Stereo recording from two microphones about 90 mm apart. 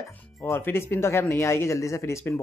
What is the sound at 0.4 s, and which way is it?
Speech, 25° left (ahead or behind).